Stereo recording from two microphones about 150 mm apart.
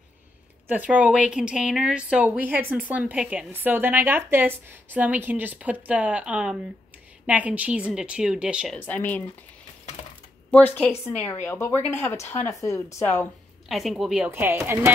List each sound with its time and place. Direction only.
0.7 s speech: 10° right (ahead or behind)
8.8 s speech: 10° left (ahead or behind)
10.5 s speech: 10° left (ahead or behind)
13.7 s speech: centre (ahead or behind)